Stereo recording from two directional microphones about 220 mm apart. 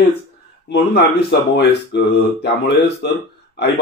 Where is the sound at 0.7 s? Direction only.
50° left (ahead or behind).